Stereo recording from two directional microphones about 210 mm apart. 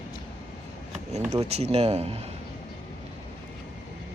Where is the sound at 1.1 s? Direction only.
30° right (ahead or behind).